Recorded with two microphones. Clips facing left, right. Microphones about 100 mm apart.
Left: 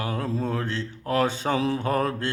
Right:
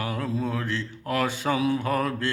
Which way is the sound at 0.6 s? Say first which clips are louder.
Left 1 dB; 30° left (ahead or behind).